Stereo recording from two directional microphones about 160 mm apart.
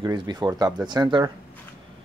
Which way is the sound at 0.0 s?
25° right (ahead or behind).